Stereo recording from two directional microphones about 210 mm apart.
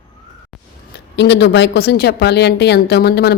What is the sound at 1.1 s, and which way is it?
A woman's voice, 55° left (ahead or behind).